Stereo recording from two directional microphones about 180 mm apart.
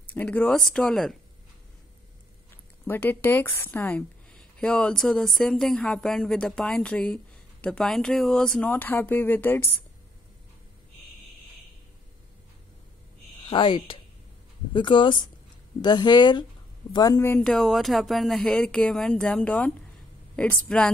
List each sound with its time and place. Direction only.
0.1 s a woman's voice: 10° left (ahead or behind)
2.9 s a woman's voice: 10° left (ahead or behind)
13.5 s speech: 25° left (ahead or behind)
17.5 s a woman's voice: centre (ahead or behind)